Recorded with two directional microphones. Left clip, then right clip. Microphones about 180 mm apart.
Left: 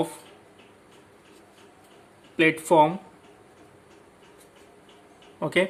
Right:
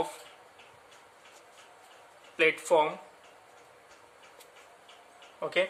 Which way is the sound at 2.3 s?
20° left (ahead or behind).